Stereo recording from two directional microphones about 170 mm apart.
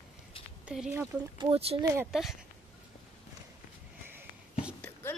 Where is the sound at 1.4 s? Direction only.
35° right (ahead or behind).